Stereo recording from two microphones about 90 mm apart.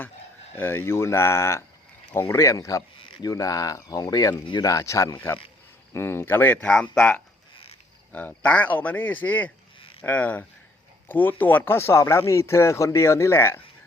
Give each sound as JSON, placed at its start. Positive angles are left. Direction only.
{"t": 0.5, "sound": "speech", "side_deg": 25}